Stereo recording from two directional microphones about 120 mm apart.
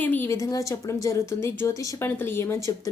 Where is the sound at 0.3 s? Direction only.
30° left (ahead or behind).